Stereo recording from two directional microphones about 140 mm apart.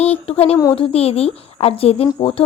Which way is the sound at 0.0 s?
45° left (ahead or behind).